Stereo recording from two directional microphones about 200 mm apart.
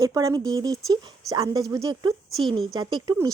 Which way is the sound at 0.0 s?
15° right (ahead or behind).